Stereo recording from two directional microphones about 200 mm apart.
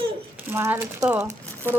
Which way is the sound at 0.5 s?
15° right (ahead or behind).